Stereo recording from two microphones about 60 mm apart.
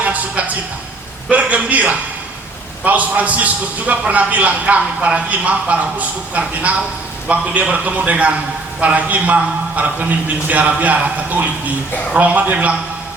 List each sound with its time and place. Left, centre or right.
0.0 s music: right
1.3 s a man's voice: right